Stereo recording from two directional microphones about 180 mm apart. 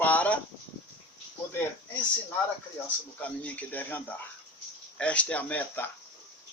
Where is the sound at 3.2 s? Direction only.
10° left (ahead or behind).